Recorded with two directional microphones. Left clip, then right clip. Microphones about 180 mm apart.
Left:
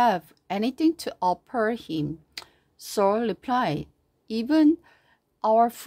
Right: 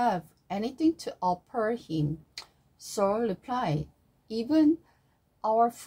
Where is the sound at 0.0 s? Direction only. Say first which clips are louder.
Left 6 dB; 50° left (ahead or behind).